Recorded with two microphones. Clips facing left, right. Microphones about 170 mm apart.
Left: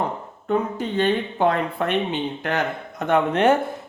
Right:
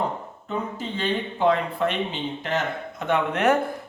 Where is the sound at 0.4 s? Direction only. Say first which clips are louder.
Left 7 dB; 60° left (ahead or behind).